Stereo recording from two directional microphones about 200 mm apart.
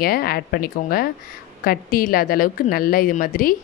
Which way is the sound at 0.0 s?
50° left (ahead or behind).